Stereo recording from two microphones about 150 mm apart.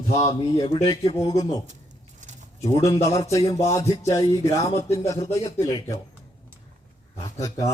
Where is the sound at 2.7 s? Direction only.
20° left (ahead or behind).